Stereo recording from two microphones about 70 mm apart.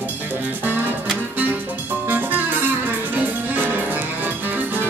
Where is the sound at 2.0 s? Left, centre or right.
Right.